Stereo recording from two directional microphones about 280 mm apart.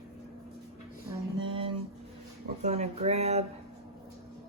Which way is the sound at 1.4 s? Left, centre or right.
Centre.